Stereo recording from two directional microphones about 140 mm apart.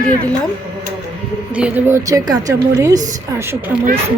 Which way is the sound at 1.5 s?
10° right (ahead or behind).